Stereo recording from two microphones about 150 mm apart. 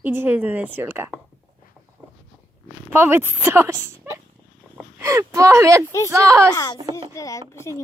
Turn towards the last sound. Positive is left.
turn(degrees=20)  # may be behind; listen again after turning